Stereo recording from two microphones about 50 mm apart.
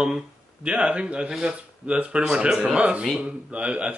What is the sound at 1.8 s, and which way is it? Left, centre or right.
Speech, right.